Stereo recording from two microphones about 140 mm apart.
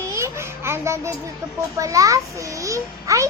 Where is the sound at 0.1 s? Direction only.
20° right (ahead or behind).